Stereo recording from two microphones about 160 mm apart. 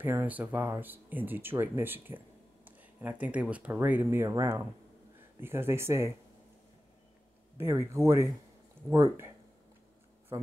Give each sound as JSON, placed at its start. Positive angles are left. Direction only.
{"t": 0.0, "sound": "speech", "side_deg": -10}
{"t": 7.5, "sound": "speech", "side_deg": -15}